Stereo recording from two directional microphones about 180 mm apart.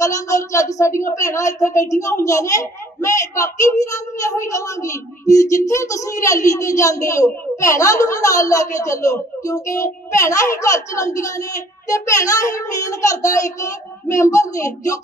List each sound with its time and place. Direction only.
0.0 s speech: 20° left (ahead or behind)